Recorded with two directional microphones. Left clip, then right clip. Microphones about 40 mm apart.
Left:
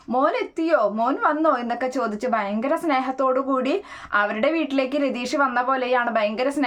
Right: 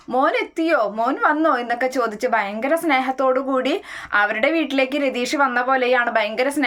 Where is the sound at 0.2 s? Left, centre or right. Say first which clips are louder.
Right 3 dB; centre.